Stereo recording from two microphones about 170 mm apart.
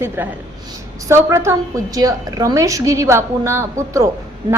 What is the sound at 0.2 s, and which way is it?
A woman's voice, 10° right (ahead or behind).